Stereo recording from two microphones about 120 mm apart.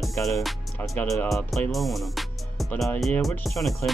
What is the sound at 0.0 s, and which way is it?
Music, centre (ahead or behind).